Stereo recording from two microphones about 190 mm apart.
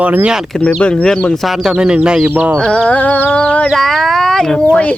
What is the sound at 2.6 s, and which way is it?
Speech, 5° left (ahead or behind).